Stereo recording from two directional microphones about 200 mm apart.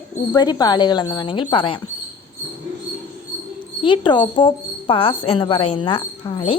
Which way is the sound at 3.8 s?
25° left (ahead or behind).